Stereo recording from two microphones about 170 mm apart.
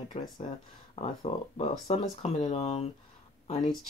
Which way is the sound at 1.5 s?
40° left (ahead or behind).